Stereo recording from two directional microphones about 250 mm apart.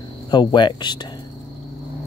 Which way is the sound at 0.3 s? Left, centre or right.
Centre.